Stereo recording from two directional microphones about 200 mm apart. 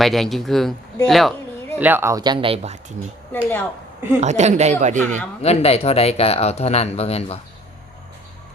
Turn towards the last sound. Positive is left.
turn(degrees=30)  # may be behind; listen again after turning